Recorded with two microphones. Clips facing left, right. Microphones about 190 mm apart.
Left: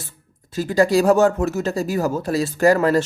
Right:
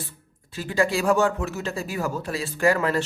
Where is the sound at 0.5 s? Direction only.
40° left (ahead or behind).